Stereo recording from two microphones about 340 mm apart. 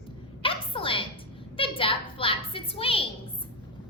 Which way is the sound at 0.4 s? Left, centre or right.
Centre.